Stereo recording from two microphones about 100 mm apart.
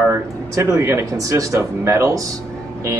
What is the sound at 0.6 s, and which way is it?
Speech, 30° right (ahead or behind).